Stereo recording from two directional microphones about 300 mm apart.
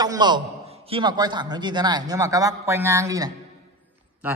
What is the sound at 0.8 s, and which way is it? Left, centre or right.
Speech, centre.